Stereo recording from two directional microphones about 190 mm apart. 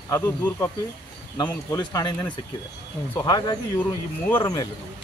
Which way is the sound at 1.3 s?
20° left (ahead or behind).